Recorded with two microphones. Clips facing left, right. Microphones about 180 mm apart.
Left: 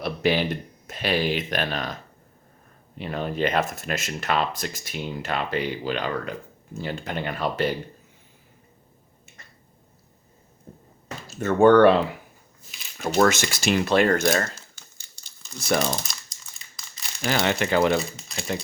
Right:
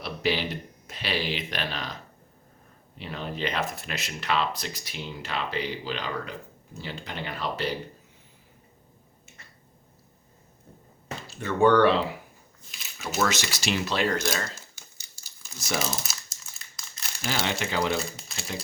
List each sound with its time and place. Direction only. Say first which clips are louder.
0.0 s a sound: left 5 dB; 50° left (ahead or behind)
0.9 s speech: left 6 dB; 50° left (ahead or behind)
3.0 s speech: left 6 dB; 50° left (ahead or behind)
11.3 s speech: left 5 dB; 45° left (ahead or behind)
15.1 s crumpling: left 1 dB; 5° right (ahead or behind)
15.5 s speech: left 6 dB; 55° left (ahead or behind)
16.0 s crumpling: left 1 dB; 5° right (ahead or behind)
17.2 s speech: left 6 dB; 55° left (ahead or behind)
18.0 s speech: left 3 dB; centre (ahead or behind)